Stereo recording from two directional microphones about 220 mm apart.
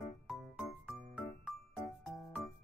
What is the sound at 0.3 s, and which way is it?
Music, centre (ahead or behind).